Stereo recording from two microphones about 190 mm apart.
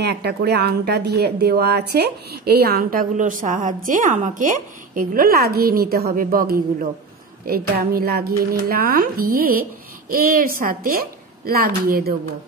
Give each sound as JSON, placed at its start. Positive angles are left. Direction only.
{"t": 0.0, "sound": "a woman's voice", "side_deg": -60}